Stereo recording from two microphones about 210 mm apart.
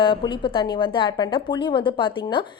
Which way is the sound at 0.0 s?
20° left (ahead or behind).